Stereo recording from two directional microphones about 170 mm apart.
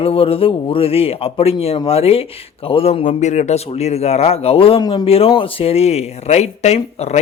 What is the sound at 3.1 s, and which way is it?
Speech, 45° left (ahead or behind).